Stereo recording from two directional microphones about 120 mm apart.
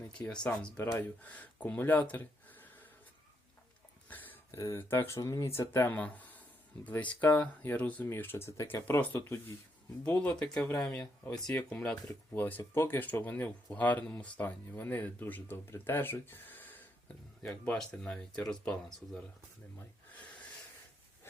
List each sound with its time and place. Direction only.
0.0 s speech: 10° left (ahead or behind)
4.1 s a sound: 15° left (ahead or behind)
4.6 s speech: 20° left (ahead or behind); by 19.2 s 5° left (ahead or behind)